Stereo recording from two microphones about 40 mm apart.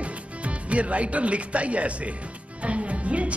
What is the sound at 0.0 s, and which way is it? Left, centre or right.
A man's voice, right.